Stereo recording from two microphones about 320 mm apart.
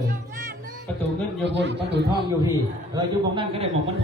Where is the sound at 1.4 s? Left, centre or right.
Right.